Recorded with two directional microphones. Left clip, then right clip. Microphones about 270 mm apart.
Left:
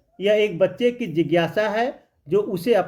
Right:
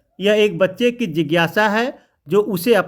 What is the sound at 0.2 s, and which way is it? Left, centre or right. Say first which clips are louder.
Speech: right 3 dB; right.